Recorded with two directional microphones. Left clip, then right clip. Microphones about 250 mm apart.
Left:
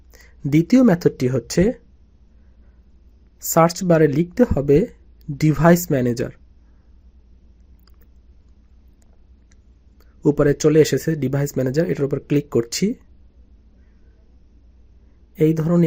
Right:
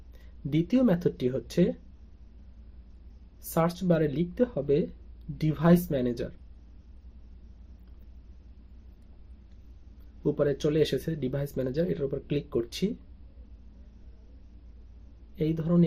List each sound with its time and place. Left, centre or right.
0.1 s speech: left
3.5 s speech: left
10.2 s speech: left
15.4 s speech: left